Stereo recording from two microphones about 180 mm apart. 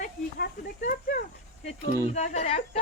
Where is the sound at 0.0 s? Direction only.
55° left (ahead or behind).